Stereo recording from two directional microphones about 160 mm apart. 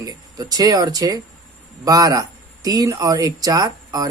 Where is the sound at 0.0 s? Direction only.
25° right (ahead or behind).